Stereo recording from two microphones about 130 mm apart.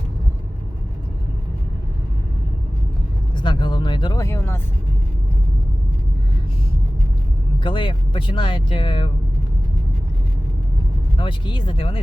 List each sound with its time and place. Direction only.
3.3 s a sound: 40° left (ahead or behind)
4.2 s speech: 20° left (ahead or behind)
7.6 s speech: 40° left (ahead or behind)
11.2 s speech: 40° left (ahead or behind)